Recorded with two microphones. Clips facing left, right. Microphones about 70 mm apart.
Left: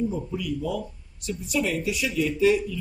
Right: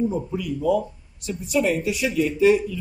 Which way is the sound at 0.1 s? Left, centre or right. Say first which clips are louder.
Right 3 dB; right.